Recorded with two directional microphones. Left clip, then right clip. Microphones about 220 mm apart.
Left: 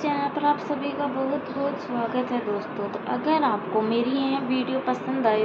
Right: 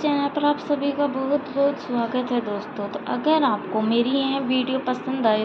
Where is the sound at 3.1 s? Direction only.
30° right (ahead or behind).